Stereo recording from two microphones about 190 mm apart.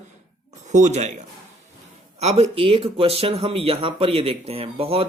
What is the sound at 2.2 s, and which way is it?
Speech, 35° right (ahead or behind).